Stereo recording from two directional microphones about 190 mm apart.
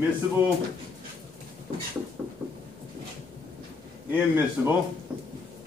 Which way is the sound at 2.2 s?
5° right (ahead or behind).